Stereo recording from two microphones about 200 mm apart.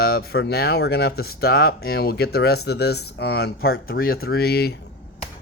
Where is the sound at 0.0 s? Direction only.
50° left (ahead or behind).